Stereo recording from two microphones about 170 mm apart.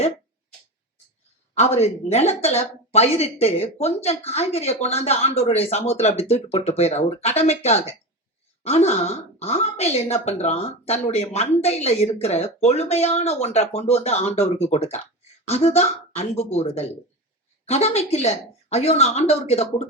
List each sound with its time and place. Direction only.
1.5 s a woman's voice: 40° left (ahead or behind)